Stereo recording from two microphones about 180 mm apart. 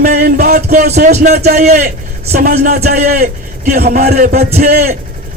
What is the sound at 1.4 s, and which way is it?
A man's voice, 60° right (ahead or behind).